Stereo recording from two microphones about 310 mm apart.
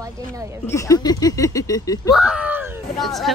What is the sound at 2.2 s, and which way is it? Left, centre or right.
Speech, centre.